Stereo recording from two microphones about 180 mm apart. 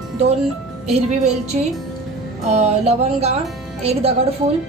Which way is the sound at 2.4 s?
40° right (ahead or behind).